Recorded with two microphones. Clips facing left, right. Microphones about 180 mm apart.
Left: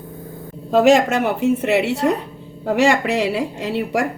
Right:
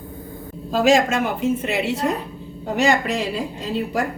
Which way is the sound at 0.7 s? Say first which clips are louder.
Left 3 dB; 65° left (ahead or behind).